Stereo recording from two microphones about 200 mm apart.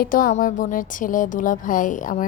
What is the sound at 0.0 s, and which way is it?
Speech, 45° left (ahead or behind).